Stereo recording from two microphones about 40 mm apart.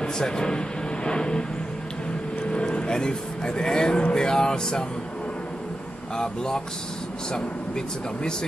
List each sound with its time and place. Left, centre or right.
0.0 s speech: centre
2.4 s vehicle: left
4.1 s speech: centre
6.1 s speech: centre